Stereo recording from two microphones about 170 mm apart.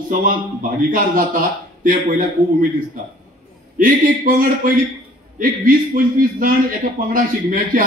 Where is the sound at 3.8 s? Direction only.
55° right (ahead or behind).